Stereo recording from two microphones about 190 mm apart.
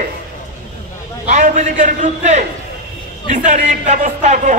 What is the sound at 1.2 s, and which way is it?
A man's voice, 40° right (ahead or behind).